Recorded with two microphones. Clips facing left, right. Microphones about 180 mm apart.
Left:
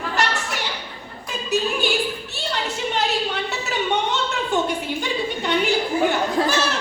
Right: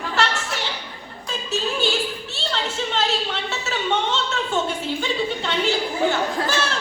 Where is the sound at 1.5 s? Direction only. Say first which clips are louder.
Left 2 dB; 15° left (ahead or behind).